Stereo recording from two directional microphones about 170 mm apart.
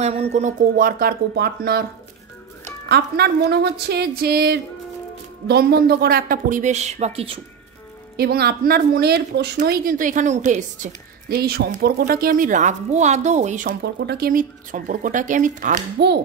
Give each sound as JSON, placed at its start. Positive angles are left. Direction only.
{"t": 0.0, "sound": "speech", "side_deg": -40}
{"t": 2.9, "sound": "a woman's voice", "side_deg": -75}
{"t": 8.2, "sound": "a woman's voice", "side_deg": -70}
{"t": 9.6, "sound": "a woman's voice", "side_deg": -55}
{"t": 11.2, "sound": "a woman's voice", "side_deg": -65}
{"t": 14.0, "sound": "a woman's voice", "side_deg": -65}